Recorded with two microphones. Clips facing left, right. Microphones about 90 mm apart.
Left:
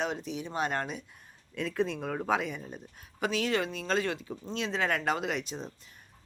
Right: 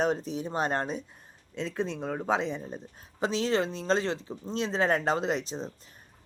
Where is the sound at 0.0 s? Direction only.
40° right (ahead or behind).